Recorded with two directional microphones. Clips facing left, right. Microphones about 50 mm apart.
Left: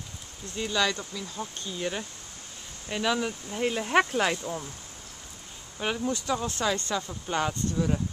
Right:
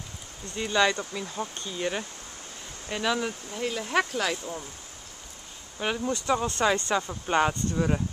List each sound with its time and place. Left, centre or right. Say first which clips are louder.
0.7 s speech: right 4 dB; centre
2.9 s speech: even; centre
3.6 s speech: left 3 dB; left
4.4 s speech: left 2 dB; centre
5.8 s speech: right 1 dB; centre
6.3 s speech: right 5 dB; centre